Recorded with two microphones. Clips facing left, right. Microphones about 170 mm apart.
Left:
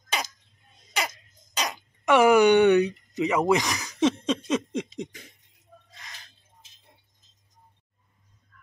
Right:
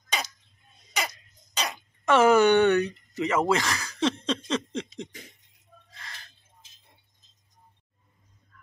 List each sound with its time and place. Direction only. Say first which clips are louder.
1.6 s speech: left 1 dB; 15° left (ahead or behind)